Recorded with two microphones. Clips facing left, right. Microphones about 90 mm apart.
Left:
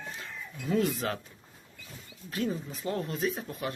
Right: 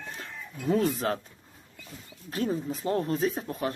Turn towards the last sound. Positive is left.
turn(degrees=-35)  # may be behind; listen again after turning